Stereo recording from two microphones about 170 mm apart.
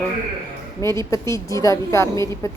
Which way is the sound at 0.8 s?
15° left (ahead or behind).